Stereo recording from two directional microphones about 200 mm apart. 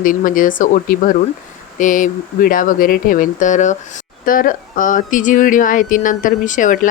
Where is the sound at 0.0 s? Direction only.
45° left (ahead or behind).